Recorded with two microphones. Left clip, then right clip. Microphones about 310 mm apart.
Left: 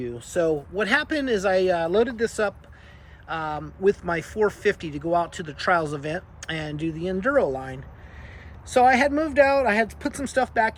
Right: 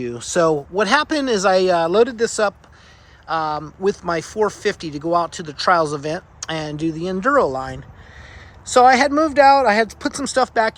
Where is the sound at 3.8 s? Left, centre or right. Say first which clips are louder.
Right 1 dB; centre.